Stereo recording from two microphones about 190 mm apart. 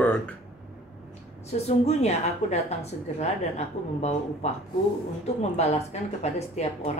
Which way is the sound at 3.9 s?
35° left (ahead or behind).